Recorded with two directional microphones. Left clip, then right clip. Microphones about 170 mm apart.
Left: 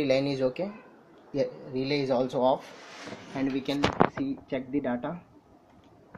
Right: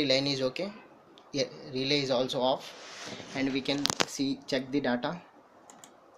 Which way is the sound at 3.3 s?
5° left (ahead or behind).